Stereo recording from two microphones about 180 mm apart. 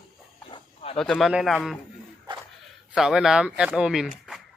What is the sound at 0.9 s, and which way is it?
Speech, 5° left (ahead or behind).